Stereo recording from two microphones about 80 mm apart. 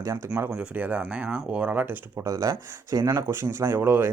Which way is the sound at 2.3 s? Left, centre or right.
Right.